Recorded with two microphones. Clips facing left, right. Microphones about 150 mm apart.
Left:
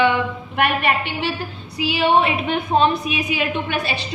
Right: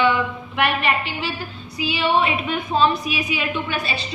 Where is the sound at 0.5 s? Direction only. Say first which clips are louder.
Left 2 dB; 50° left (ahead or behind).